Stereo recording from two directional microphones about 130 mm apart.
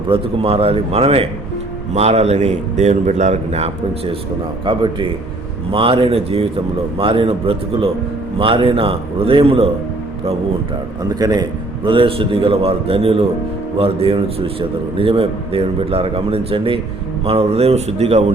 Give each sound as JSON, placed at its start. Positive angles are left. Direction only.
{"t": 0.1, "sound": "a man's voice", "side_deg": -50}
{"t": 4.6, "sound": "a man's voice", "side_deg": -40}
{"t": 11.0, "sound": "a man's voice", "side_deg": -30}
{"t": 11.9, "sound": "a man's voice", "side_deg": -45}